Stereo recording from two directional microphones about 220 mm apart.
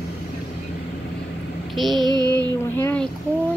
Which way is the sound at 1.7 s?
Centre (ahead or behind).